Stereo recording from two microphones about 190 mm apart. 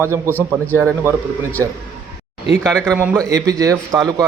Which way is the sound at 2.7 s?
5° left (ahead or behind).